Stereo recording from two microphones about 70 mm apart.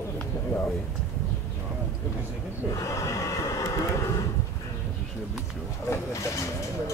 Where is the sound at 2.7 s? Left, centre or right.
Left.